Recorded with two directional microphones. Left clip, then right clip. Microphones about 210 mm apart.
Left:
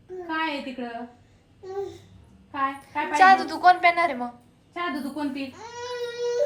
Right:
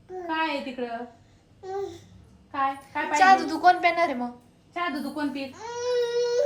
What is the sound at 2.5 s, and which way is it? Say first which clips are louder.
A woman's voice: even; 5° right (ahead or behind).